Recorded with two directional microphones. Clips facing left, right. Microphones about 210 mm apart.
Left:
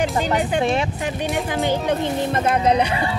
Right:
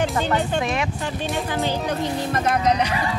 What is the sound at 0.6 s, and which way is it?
Speech, 30° left (ahead or behind).